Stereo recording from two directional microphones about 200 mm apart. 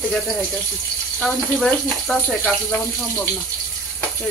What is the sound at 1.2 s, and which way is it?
Speech, centre (ahead or behind).